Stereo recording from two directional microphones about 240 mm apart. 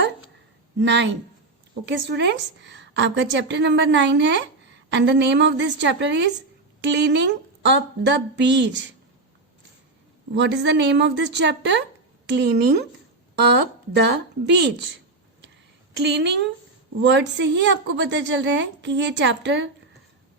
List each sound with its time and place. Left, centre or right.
0.8 s a woman's voice: right
10.3 s a woman's voice: right
16.0 s a woman's voice: right